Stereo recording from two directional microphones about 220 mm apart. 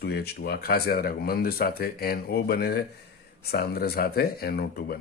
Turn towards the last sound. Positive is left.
turn(degrees=45)  # may be behind; listen again after turning